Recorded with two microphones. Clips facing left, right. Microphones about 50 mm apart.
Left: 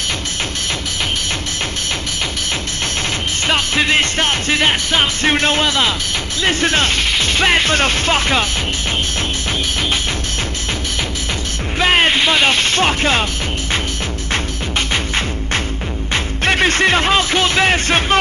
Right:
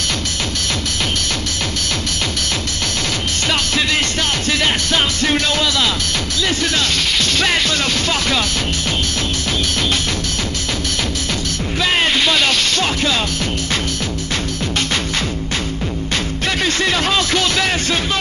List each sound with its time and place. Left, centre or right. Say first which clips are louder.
3.4 s music: left 3 dB; left
6.4 s speech: left 4 dB; left
11.8 s music: left 3 dB; left
16.4 s speech: left 5 dB; left